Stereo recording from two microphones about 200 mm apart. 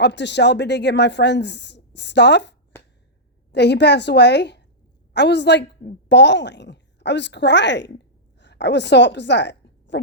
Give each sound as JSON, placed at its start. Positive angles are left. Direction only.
{"t": 0.0, "sound": "a woman's voice", "side_deg": 60}